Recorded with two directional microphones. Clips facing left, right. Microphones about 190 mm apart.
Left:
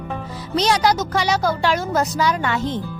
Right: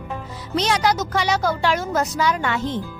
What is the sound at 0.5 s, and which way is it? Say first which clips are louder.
Speech: left 2 dB; 35° left (ahead or behind).